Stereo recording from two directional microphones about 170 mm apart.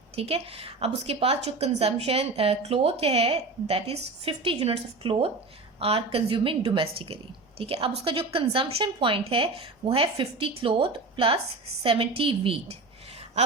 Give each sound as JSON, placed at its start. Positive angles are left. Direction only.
{"t": 0.2, "sound": "a woman's voice", "side_deg": -35}